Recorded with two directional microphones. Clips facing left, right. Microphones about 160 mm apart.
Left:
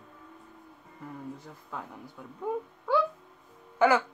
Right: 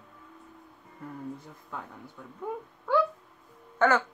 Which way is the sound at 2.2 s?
10° left (ahead or behind).